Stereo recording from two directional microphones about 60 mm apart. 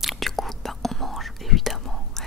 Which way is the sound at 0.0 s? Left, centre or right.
Centre.